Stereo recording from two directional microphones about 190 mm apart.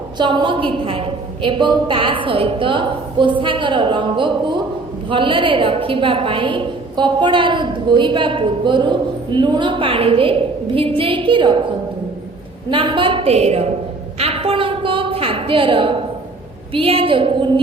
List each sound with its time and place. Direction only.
0.2 s a woman's voice: 25° right (ahead or behind)
12.7 s a woman's voice: 25° right (ahead or behind)
14.2 s a sound: 30° right (ahead or behind)
16.7 s a woman's voice: 30° right (ahead or behind)